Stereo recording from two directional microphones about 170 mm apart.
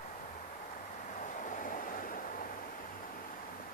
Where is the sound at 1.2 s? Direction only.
50° left (ahead or behind).